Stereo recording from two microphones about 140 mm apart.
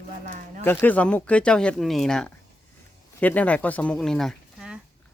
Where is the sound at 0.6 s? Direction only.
15° left (ahead or behind).